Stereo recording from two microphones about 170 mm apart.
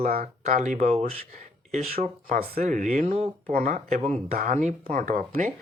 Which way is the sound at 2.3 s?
55° right (ahead or behind).